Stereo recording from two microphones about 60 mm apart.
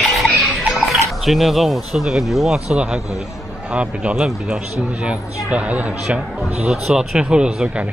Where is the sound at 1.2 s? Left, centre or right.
Centre.